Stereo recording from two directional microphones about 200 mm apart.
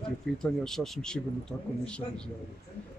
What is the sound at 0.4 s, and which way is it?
A man's voice, centre (ahead or behind).